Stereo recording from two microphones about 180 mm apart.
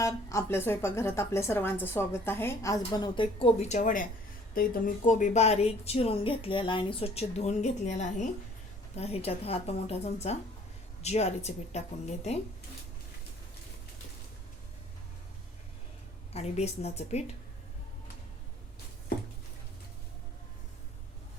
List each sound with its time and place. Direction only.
0.0 s a woman's voice: 15° left (ahead or behind); by 12.4 s 35° left (ahead or behind)
16.3 s a woman's voice: 35° left (ahead or behind)